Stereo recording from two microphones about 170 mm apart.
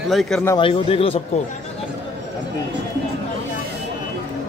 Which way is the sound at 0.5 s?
30° left (ahead or behind).